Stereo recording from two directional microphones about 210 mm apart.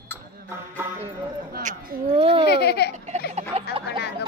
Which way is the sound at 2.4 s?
50° left (ahead or behind).